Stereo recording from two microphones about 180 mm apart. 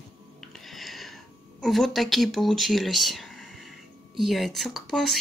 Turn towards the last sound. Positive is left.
turn(degrees=0)  # may be behind; listen again after turning